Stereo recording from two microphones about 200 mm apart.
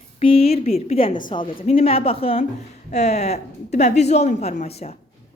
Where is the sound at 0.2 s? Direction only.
30° left (ahead or behind).